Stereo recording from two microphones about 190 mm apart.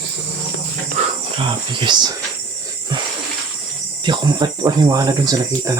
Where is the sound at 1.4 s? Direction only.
25° right (ahead or behind).